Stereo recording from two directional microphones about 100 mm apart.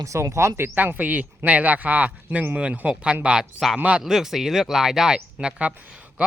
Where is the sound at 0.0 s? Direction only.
30° right (ahead or behind).